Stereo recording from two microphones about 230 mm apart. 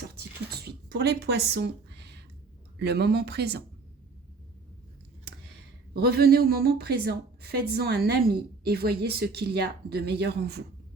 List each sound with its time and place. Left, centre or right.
0.2 s a sound: right
2.7 s a woman's voice: right
5.9 s a woman's voice: right